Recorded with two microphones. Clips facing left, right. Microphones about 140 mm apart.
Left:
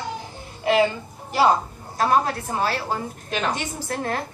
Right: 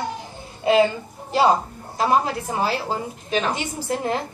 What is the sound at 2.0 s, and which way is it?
A woman's voice, 20° right (ahead or behind).